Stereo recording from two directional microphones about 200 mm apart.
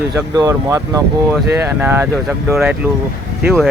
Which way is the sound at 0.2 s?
15° right (ahead or behind).